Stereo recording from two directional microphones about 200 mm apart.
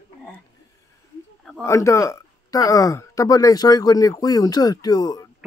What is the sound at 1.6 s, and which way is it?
Speech, 15° left (ahead or behind).